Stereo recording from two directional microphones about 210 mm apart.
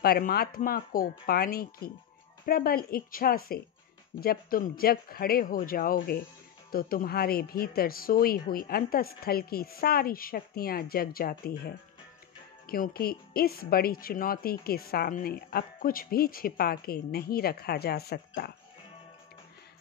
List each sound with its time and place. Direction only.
0.0 s a woman's voice: 45° left (ahead or behind)